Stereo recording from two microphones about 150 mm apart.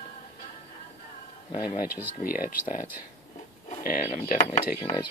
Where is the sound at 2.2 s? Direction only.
70° left (ahead or behind).